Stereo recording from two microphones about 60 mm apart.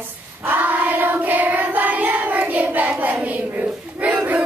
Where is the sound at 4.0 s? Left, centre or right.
Right.